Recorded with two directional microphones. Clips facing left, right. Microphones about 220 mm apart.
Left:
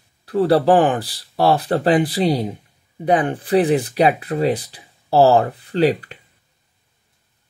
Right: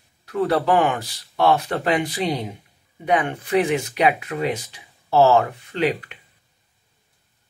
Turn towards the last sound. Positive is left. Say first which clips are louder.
# left 5 dB
turn(degrees=35)  # may be behind; listen again after turning